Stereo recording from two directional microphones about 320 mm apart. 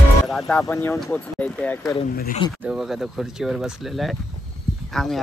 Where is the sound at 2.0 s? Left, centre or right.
Left.